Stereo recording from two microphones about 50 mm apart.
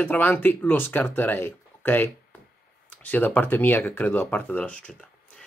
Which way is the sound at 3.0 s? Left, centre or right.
Left.